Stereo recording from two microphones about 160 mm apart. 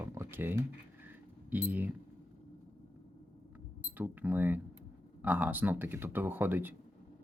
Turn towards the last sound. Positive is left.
turn(degrees=-10)  # may be behind; listen again after turning